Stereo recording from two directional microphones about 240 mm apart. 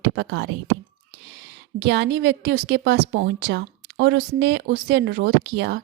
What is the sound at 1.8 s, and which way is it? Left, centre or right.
A woman's voice, right.